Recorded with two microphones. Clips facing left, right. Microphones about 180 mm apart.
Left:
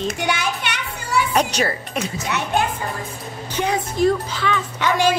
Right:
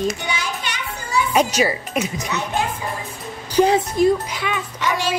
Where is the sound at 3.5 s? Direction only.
35° right (ahead or behind).